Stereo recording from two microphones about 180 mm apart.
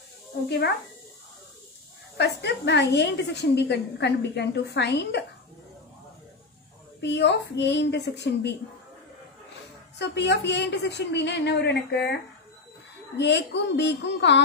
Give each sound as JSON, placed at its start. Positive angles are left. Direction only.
{"t": 2.1, "sound": "a woman's voice", "side_deg": 70}
{"t": 7.0, "sound": "a woman's voice", "side_deg": 75}
{"t": 9.9, "sound": "a woman's voice", "side_deg": 70}
{"t": 13.2, "sound": "a woman's voice", "side_deg": 75}